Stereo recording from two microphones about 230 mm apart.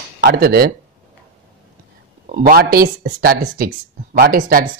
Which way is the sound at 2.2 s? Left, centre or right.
Right.